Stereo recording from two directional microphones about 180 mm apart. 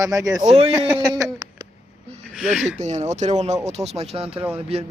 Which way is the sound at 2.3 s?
Centre (ahead or behind).